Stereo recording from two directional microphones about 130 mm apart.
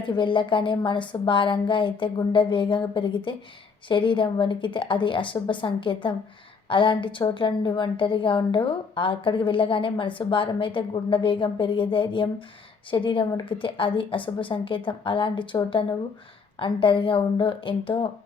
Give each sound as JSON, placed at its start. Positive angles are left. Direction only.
{"t": 0.0, "sound": "a woman's voice", "side_deg": 40}